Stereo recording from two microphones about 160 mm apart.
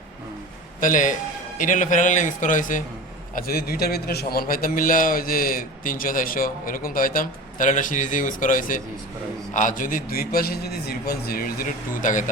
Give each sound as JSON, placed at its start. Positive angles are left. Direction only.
{"t": 0.8, "sound": "a man's voice", "side_deg": 55}
{"t": 3.3, "sound": "a man's voice", "side_deg": 65}